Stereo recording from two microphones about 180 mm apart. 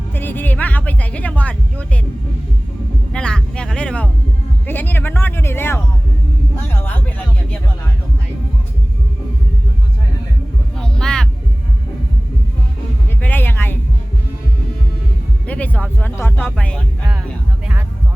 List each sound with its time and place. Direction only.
0.1 s music: 10° left (ahead or behind)
3.1 s music: 5° left (ahead or behind)
4.6 s speech: 10° left (ahead or behind)
10.8 s music: 5° left (ahead or behind)
13.2 s music: 10° left (ahead or behind)
15.4 s music: 10° left (ahead or behind)